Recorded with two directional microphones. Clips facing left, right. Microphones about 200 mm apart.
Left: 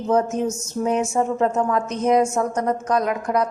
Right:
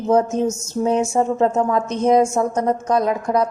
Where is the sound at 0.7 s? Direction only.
30° right (ahead or behind).